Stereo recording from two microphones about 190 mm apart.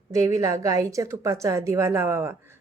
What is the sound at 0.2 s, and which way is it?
A woman's voice, 15° right (ahead or behind).